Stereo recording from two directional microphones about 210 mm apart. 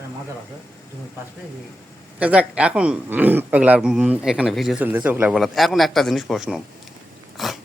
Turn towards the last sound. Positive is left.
turn(degrees=0)  # may be behind; listen again after turning